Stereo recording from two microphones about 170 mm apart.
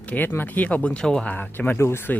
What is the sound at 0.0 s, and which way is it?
Speech, 10° left (ahead or behind).